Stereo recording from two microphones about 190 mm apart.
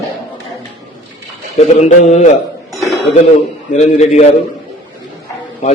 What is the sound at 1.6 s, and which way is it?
Speech, 35° left (ahead or behind).